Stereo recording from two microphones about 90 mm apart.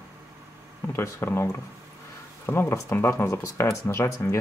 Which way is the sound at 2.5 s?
30° left (ahead or behind).